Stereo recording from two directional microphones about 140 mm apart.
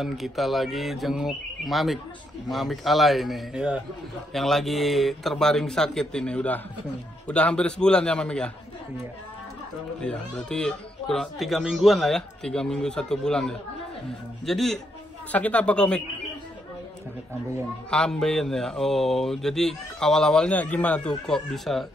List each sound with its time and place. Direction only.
0.0 s a man's voice: centre (ahead or behind)
10.0 s a man's voice: 5° left (ahead or behind)
17.8 s speech: 5° left (ahead or behind)